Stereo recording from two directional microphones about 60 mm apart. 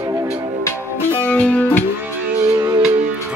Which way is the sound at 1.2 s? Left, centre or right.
Left.